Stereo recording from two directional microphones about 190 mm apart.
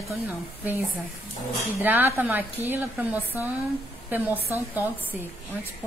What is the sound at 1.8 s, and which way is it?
A woman's voice, 10° right (ahead or behind).